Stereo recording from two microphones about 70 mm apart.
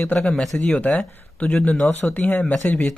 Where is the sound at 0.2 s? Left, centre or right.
Centre.